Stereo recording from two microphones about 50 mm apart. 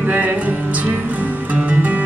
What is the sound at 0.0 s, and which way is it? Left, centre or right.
Music, right.